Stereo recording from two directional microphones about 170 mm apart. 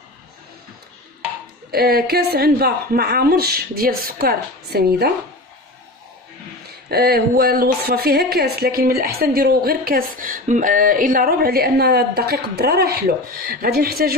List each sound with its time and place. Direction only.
1.7 s speech: 65° right (ahead or behind)
6.9 s speech: 65° right (ahead or behind)